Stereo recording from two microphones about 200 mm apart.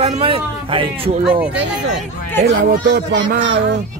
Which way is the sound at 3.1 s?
60° right (ahead or behind).